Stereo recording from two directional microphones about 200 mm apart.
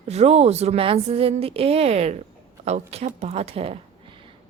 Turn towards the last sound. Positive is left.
turn(degrees=-30)  # may be behind; listen again after turning